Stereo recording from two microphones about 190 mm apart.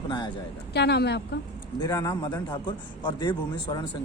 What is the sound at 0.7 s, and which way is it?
Speech, 60° left (ahead or behind).